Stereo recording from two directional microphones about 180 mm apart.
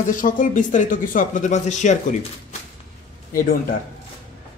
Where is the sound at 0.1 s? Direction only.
50° left (ahead or behind).